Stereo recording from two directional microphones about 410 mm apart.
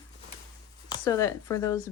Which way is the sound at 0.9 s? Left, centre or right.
Centre.